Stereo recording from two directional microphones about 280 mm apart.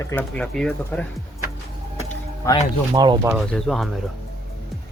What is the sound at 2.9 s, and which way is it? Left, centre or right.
Speech, centre.